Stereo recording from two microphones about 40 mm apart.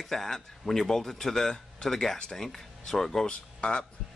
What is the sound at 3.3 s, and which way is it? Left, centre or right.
Speech, left.